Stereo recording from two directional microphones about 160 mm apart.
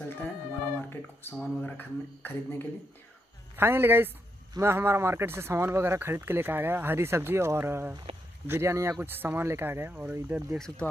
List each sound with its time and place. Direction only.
0.7 s a sound: 15° left (ahead or behind)
1.4 s speech: 10° left (ahead or behind)
3.5 s speech: 15° right (ahead or behind)
10.8 s speech: 10° left (ahead or behind)